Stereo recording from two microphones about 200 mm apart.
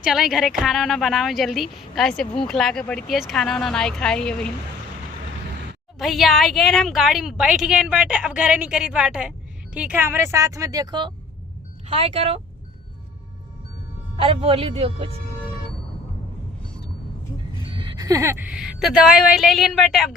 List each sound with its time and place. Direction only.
0.0 s a woman's voice: 5° right (ahead or behind)
6.0 s a woman's voice: centre (ahead or behind); by 12.4 s 30° right (ahead or behind)
14.2 s speech: 30° right (ahead or behind)
17.7 s a woman's voice: 25° right (ahead or behind); by 20.1 s centre (ahead or behind)